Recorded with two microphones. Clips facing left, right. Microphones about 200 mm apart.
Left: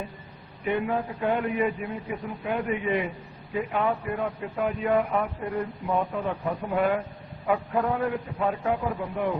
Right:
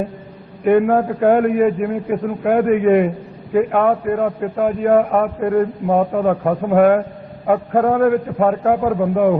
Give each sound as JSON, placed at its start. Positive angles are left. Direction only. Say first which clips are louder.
{"t": 0.6, "sound": "a man's voice", "louder": "right 13 dB", "side_deg": -60}